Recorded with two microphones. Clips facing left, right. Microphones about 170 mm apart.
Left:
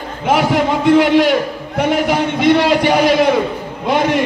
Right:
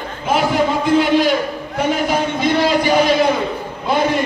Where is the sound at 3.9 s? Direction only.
75° left (ahead or behind).